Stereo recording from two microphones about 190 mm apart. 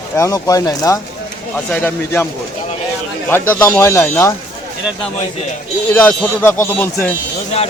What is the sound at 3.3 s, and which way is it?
Speech, 15° left (ahead or behind).